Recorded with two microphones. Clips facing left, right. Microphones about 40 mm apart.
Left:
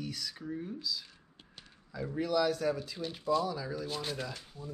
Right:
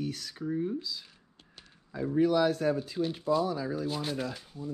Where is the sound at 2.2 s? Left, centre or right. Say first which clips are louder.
Right 4 dB; right.